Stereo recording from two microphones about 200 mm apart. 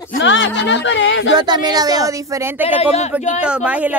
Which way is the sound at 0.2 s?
65° left (ahead or behind).